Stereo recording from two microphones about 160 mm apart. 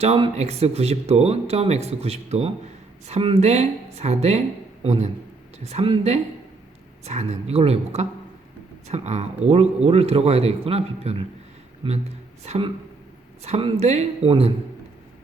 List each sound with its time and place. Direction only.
0.0 s speech: 40° right (ahead or behind)